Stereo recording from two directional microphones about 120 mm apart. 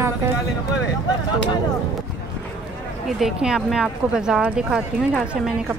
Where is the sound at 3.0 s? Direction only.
Centre (ahead or behind).